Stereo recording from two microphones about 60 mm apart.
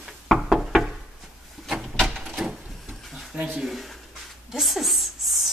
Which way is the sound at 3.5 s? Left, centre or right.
Centre.